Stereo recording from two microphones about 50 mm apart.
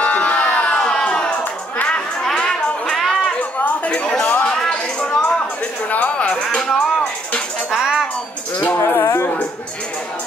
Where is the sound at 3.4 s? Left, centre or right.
Left.